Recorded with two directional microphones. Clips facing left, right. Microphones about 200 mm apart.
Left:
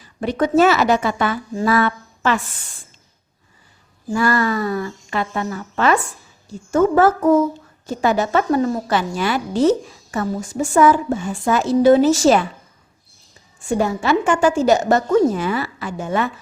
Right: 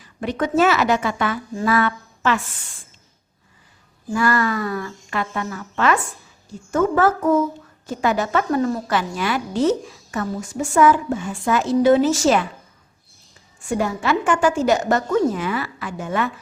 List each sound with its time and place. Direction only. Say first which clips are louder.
0.0 s a woman's voice: left 3 dB; 35° left (ahead or behind)
4.1 s a woman's voice: left 2 dB; 30° left (ahead or behind)
13.7 s a woman's voice: left 3 dB; 30° left (ahead or behind)